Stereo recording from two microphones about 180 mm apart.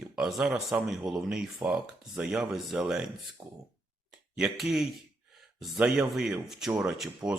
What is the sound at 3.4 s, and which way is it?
Speech, 20° right (ahead or behind).